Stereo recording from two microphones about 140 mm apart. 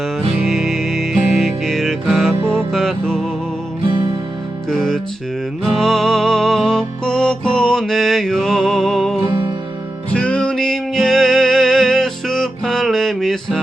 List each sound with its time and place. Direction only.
0.3 s music: centre (ahead or behind)
3.8 s music: 30° right (ahead or behind)
4.7 s music: 5° left (ahead or behind)
9.2 s music: 35° right (ahead or behind)
10.1 s music: 5° left (ahead or behind)